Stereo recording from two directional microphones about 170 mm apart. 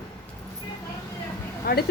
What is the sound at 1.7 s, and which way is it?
Speech, 65° left (ahead or behind).